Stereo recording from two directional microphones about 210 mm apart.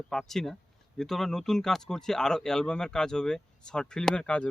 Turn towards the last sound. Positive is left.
turn(degrees=5)  # may be behind; listen again after turning